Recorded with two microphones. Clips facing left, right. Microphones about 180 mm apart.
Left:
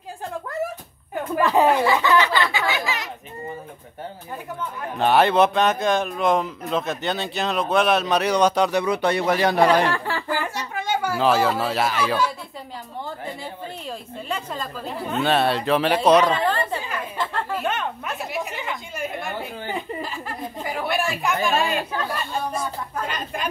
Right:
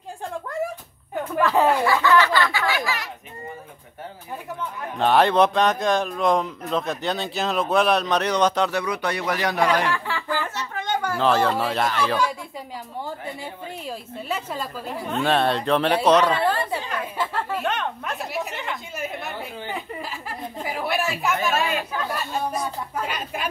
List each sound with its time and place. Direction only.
1.4 s speech: 20° left (ahead or behind)
4.6 s speech: 5° left (ahead or behind)
8.8 s speech: 25° left (ahead or behind)
10.3 s a sound: 15° left (ahead or behind)
13.2 s a sound: 10° right (ahead or behind)
15.0 s speech: 5° left (ahead or behind)
16.3 s chatter: 10° right (ahead or behind)
17.0 s a sound: 10° right (ahead or behind)
20.5 s chatter: centre (ahead or behind)